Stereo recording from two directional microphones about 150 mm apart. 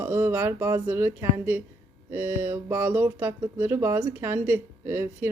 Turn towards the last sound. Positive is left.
turn(degrees=-15)  # may be behind; listen again after turning